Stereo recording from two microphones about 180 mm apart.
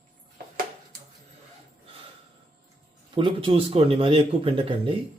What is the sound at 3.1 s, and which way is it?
Speech, 30° right (ahead or behind).